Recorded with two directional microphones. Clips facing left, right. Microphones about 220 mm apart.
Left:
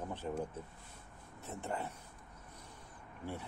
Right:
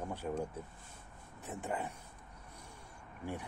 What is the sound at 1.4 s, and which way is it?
Speech, 15° right (ahead or behind).